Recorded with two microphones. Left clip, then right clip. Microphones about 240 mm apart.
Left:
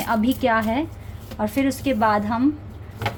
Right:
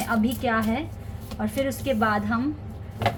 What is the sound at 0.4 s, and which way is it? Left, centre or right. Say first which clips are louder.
Speech: left 7 dB; left.